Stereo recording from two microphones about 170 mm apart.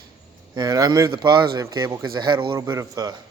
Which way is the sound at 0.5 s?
20° right (ahead or behind).